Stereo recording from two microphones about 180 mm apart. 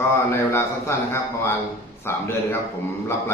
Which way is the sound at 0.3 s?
15° left (ahead or behind).